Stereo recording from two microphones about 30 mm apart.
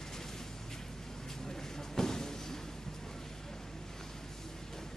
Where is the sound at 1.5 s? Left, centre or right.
Centre.